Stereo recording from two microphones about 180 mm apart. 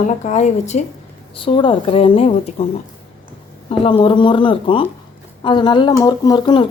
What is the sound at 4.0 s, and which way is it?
A woman's voice, 25° left (ahead or behind).